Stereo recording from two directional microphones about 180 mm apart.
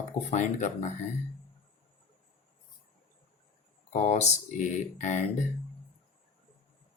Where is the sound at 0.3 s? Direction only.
40° left (ahead or behind).